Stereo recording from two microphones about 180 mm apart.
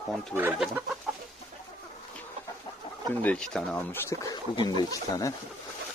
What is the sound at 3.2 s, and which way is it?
Speech, 5° left (ahead or behind).